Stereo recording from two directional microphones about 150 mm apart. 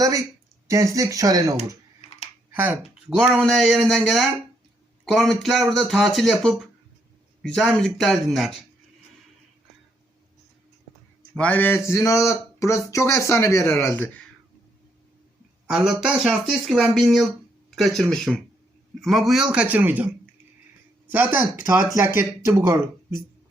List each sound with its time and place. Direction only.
0.0 s speech: 20° right (ahead or behind)
2.0 s typing: 45° left (ahead or behind)
2.5 s speech: 10° right (ahead or behind)
3.2 s speech: centre (ahead or behind)
11.3 s speech: 10° left (ahead or behind)
15.7 s a man's voice: centre (ahead or behind)
21.1 s a man's voice: 10° right (ahead or behind)